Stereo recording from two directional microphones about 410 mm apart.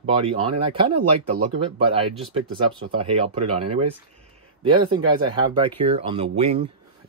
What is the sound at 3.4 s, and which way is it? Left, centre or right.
Speech, right.